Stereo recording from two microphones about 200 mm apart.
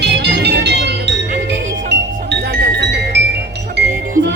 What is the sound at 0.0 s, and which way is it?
Music, 60° right (ahead or behind).